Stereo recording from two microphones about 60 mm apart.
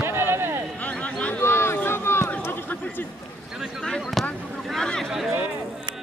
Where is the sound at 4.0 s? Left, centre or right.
Centre.